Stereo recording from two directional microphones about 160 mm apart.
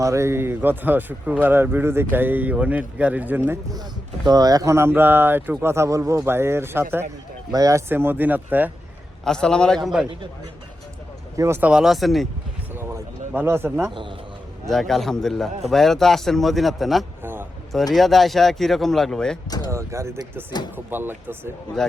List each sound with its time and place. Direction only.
0.0 s speech: 15° right (ahead or behind)
9.2 s speech: 5° left (ahead or behind)
11.3 s speech: 15° right (ahead or behind); by 12.3 s centre (ahead or behind)
12.7 s a sound: 15° right (ahead or behind)
14.7 s speech: centre (ahead or behind)
19.5 s speech: 25° left (ahead or behind)
19.7 s speech: 20° right (ahead or behind)